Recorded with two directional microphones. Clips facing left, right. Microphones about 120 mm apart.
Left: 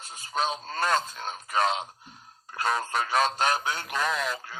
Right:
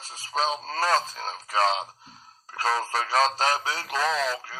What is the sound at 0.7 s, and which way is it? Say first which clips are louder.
Speech: right 2 dB; 35° right (ahead or behind).